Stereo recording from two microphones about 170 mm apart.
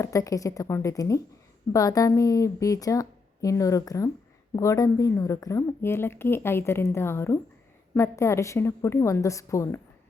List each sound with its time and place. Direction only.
0.0 s a woman's voice: 20° left (ahead or behind)